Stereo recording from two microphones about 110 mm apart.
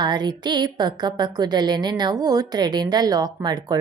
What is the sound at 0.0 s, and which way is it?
Speech, 40° right (ahead or behind).